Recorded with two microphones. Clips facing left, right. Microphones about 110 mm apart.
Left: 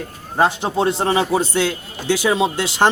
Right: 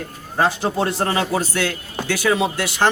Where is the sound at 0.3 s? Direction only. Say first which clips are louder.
Left 2 dB; 20° left (ahead or behind).